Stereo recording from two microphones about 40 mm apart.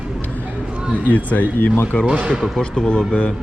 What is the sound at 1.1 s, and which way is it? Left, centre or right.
Speech, left.